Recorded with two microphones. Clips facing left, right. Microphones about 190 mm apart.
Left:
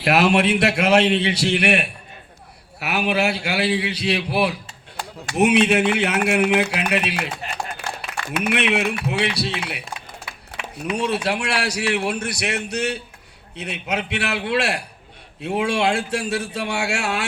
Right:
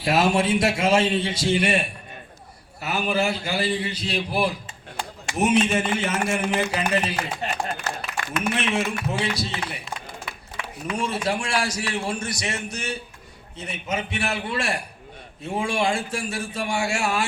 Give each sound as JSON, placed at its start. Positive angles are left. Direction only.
{"t": 0.0, "sound": "a man's voice", "side_deg": 65}
{"t": 8.4, "sound": "a man's voice", "side_deg": 70}